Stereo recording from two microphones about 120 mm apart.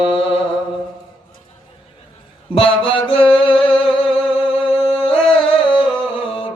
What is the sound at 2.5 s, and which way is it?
Music, 50° left (ahead or behind).